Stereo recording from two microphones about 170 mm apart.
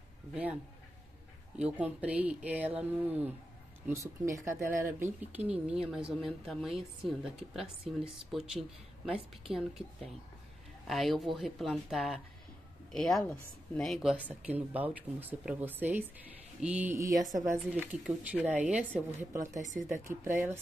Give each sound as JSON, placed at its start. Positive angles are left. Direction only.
{"t": 0.3, "sound": "speech", "side_deg": -10}
{"t": 1.6, "sound": "speech", "side_deg": -5}
{"t": 14.1, "sound": "speech", "side_deg": -10}
{"t": 17.7, "sound": "speech", "side_deg": -10}
{"t": 19.9, "sound": "speech", "side_deg": -15}